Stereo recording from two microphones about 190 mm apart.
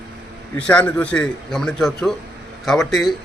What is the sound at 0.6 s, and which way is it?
A man's voice, 5° left (ahead or behind).